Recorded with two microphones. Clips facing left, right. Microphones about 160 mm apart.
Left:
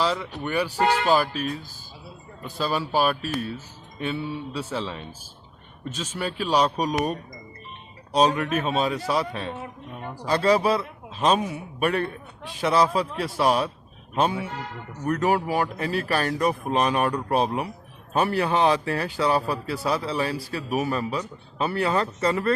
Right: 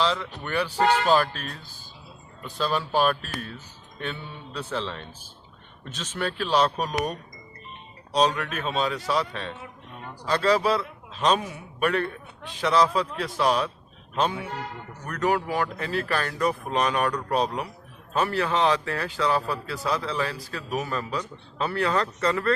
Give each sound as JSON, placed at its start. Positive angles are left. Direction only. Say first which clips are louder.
{"t": 0.0, "sound": "a man's voice", "louder": "left 1 dB", "side_deg": 5}
{"t": 15.7, "sound": "a man's voice", "louder": "left 2 dB", "side_deg": 10}
{"t": 16.9, "sound": "speech", "louder": "left 2 dB", "side_deg": 25}
{"t": 17.3, "sound": "a man's voice", "louder": "left 2 dB", "side_deg": 10}